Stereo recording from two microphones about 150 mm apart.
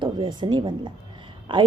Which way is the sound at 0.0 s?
30° right (ahead or behind).